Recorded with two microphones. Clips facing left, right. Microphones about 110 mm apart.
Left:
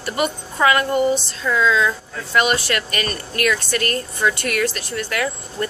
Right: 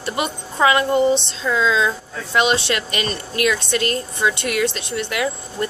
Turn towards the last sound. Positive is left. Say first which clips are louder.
# right 1 dB
turn(degrees=-20)  # may be behind; listen again after turning